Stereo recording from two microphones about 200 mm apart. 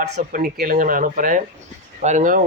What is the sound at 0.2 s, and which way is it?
Speech, 45° right (ahead or behind).